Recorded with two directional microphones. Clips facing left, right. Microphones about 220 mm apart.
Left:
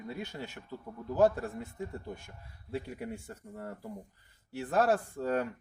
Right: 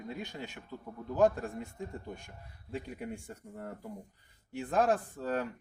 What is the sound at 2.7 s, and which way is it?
Speech, 5° left (ahead or behind).